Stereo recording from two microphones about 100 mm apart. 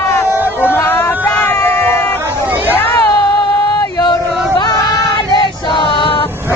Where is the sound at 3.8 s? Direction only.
40° left (ahead or behind).